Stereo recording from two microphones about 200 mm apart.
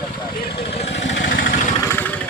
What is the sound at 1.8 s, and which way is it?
Vehicle, 10° left (ahead or behind).